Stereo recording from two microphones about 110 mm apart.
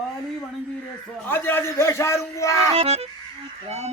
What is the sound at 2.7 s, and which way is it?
Music, 65° right (ahead or behind).